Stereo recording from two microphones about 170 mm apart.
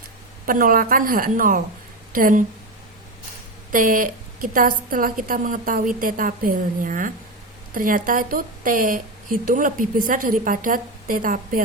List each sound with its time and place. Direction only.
0.4 s a woman's voice: 55° right (ahead or behind)
3.7 s a woman's voice: 55° right (ahead or behind)